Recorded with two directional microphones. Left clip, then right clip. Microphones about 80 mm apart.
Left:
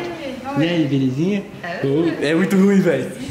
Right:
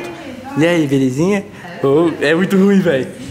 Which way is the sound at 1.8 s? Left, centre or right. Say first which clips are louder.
Right 7 dB; left.